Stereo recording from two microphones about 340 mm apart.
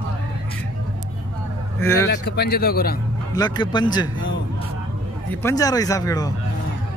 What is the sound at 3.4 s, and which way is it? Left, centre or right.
Speech, centre.